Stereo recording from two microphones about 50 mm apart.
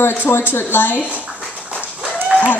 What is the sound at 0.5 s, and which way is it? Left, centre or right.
Speech, left.